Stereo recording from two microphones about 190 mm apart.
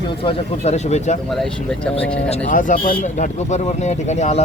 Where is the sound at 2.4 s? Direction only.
45° left (ahead or behind).